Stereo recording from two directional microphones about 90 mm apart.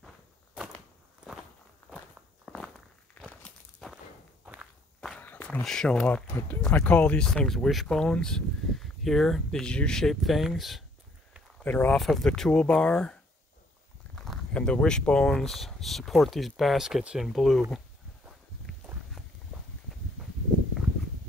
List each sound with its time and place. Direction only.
1.8 s walk: 10° left (ahead or behind)
3.2 s walk: 10° left (ahead or behind)
3.8 s a sound: 5° left (ahead or behind)
5.2 s walk: 20° left (ahead or behind)
5.6 s speech: 5° left (ahead or behind)
11.6 s speech: 15° left (ahead or behind)